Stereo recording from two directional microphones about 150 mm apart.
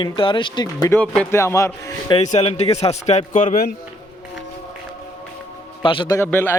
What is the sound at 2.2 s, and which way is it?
A man's voice, 45° left (ahead or behind).